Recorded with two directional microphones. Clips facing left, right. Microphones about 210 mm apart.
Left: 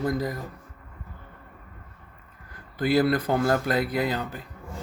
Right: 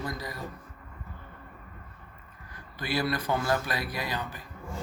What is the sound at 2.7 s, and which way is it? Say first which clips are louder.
Speech: left 8 dB; 55° left (ahead or behind).